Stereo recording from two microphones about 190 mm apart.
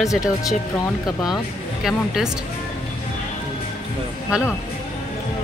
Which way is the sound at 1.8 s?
Centre (ahead or behind).